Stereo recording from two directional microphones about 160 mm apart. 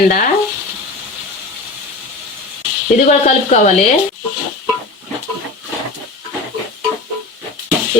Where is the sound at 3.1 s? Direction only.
45° left (ahead or behind).